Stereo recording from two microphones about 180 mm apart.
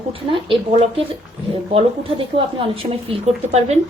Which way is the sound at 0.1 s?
30° right (ahead or behind).